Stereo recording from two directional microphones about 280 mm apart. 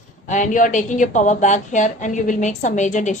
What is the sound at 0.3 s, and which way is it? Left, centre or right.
A woman's voice, left.